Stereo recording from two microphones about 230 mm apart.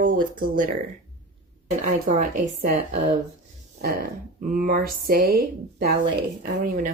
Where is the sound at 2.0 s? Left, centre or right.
Right.